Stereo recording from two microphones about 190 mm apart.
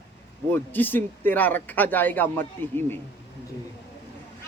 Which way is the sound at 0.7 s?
10° left (ahead or behind).